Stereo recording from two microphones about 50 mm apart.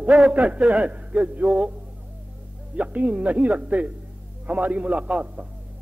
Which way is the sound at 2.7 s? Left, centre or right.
Right.